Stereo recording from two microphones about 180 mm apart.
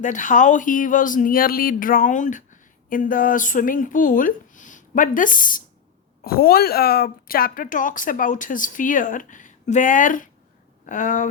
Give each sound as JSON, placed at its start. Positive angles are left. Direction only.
{"t": 0.0, "sound": "speech", "side_deg": 45}